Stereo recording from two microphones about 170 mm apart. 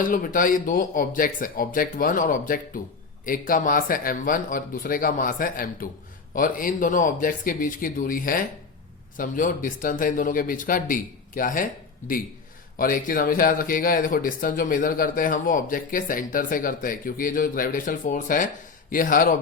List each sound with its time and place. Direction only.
0.0 s speech: 55° left (ahead or behind)